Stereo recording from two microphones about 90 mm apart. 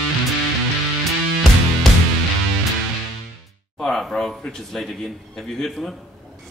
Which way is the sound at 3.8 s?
Centre (ahead or behind).